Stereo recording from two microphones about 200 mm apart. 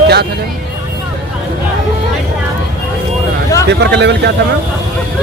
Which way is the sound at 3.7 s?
60° right (ahead or behind).